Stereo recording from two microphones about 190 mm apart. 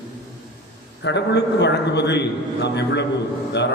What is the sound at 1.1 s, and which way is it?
A man's voice, 65° left (ahead or behind).